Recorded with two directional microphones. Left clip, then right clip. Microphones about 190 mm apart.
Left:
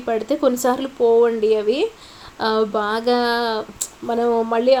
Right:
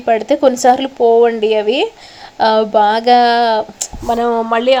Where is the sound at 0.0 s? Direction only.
15° right (ahead or behind).